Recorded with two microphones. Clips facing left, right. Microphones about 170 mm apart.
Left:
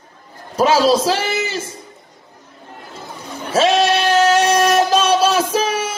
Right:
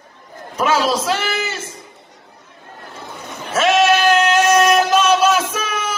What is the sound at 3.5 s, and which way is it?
Female singing, 30° left (ahead or behind).